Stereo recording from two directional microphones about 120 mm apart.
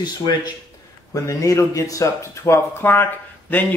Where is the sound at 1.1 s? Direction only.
25° left (ahead or behind).